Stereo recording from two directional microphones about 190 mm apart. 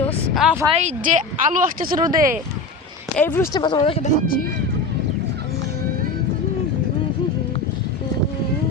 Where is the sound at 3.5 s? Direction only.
20° left (ahead or behind).